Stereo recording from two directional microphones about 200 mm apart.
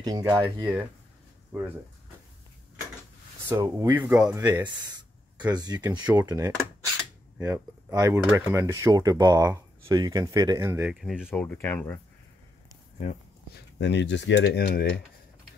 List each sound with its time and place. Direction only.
0.0 s speech: 20° right (ahead or behind)
3.4 s speech: 15° right (ahead or behind)
5.5 s speech: 20° right (ahead or behind); by 11.2 s 5° right (ahead or behind)
11.2 s speech: 10° left (ahead or behind)
13.7 s speech: 60° left (ahead or behind)